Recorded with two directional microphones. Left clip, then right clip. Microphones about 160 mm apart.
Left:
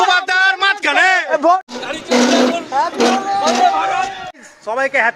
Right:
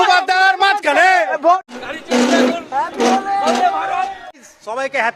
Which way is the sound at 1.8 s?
Centre (ahead or behind).